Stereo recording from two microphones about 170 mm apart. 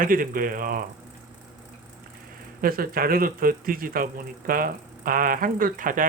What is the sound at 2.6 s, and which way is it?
Speech, 60° right (ahead or behind).